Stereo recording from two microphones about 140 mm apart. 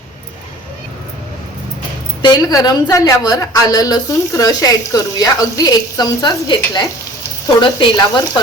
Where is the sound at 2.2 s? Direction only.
30° left (ahead or behind).